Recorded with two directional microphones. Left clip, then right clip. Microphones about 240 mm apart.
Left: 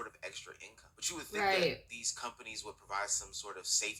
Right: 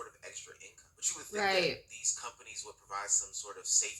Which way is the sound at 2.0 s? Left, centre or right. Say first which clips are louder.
Right 2 dB; left.